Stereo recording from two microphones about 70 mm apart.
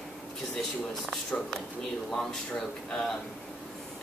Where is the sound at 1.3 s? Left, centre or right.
Centre.